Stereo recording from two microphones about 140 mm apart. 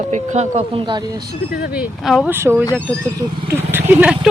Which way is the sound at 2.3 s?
15° right (ahead or behind).